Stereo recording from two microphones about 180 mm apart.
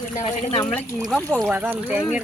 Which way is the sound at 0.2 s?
35° left (ahead or behind).